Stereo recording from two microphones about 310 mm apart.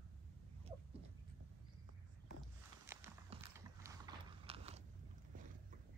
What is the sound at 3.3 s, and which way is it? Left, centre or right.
Mechanisms, centre.